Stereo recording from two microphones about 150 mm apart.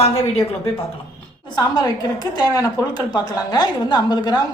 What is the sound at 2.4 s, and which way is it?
A woman's voice, 25° left (ahead or behind).